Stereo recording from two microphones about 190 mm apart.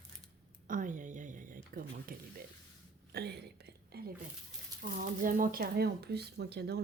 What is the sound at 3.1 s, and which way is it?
Whispering, 55° right (ahead or behind).